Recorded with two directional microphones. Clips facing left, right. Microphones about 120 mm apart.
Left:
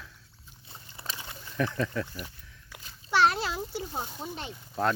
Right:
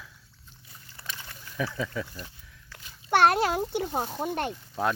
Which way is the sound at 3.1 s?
55° right (ahead or behind).